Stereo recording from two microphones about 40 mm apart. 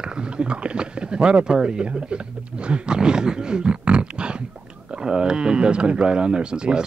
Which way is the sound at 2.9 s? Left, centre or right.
Centre.